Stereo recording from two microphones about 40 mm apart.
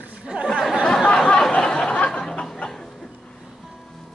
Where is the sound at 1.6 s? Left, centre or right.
Left.